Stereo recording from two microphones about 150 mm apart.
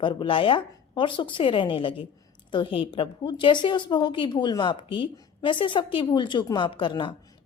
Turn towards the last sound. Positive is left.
turn(degrees=35)  # may be behind; listen again after turning